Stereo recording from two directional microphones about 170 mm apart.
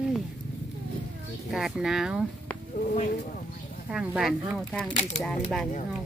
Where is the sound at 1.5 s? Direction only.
5° right (ahead or behind).